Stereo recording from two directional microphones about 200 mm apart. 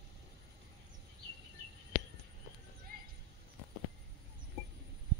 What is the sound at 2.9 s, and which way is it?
Horse, 45° right (ahead or behind).